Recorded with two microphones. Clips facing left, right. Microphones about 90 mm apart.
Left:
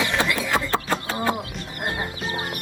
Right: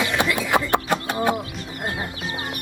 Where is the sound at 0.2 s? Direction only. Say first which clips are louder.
Right 2 dB; 20° right (ahead or behind).